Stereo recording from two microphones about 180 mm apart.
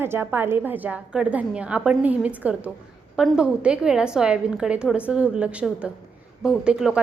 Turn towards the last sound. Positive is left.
turn(degrees=-5)  # may be behind; listen again after turning